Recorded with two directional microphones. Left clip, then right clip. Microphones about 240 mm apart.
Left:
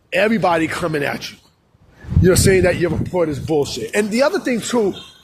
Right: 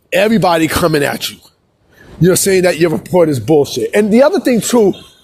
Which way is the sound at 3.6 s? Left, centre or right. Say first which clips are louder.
Right 7 dB; right.